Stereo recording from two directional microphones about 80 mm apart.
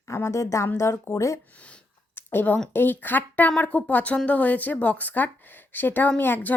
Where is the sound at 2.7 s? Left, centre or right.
Left.